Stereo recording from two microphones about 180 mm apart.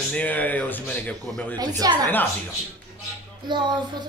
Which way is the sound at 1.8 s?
20° right (ahead or behind).